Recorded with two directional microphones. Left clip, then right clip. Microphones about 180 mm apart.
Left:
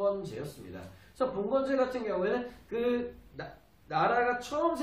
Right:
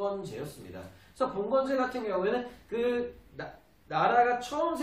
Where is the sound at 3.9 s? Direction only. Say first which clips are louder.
Right 3 dB; 10° left (ahead or behind).